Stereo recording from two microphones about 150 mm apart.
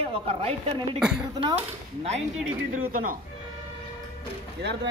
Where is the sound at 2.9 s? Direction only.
65° right (ahead or behind).